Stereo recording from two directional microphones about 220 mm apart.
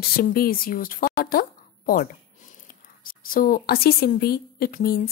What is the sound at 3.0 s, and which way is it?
A woman's voice, 40° left (ahead or behind).